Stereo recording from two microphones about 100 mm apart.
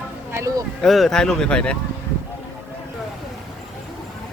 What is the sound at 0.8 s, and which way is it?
Speech, centre (ahead or behind).